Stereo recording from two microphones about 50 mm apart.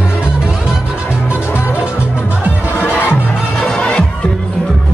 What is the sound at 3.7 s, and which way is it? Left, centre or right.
Music, centre.